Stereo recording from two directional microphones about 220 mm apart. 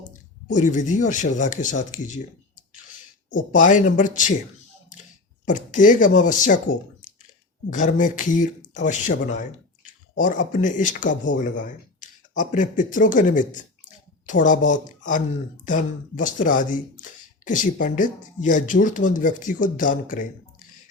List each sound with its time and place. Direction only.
0.4 s speech: 35° left (ahead or behind)
3.3 s speech: 35° left (ahead or behind)
5.5 s speech: 35° left (ahead or behind)